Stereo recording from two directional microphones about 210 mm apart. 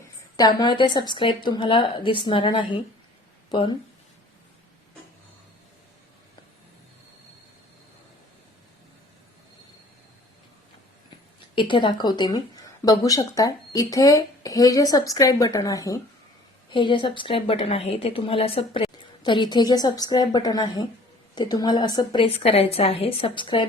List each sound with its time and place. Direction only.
0.3 s a woman's voice: 20° left (ahead or behind)
11.5 s a woman's voice: 25° left (ahead or behind)